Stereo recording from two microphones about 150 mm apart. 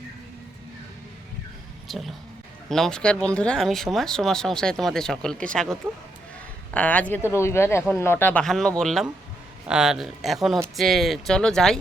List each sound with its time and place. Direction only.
1.9 s speech: centre (ahead or behind)
6.7 s speech: 10° left (ahead or behind)